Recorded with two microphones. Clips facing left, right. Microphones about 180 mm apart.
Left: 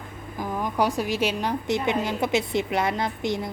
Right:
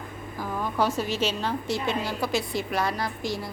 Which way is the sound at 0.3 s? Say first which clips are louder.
Left 2 dB; 15° left (ahead or behind).